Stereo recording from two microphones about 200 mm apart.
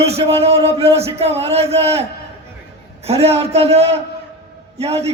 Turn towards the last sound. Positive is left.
turn(degrees=-30)  # may be behind; listen again after turning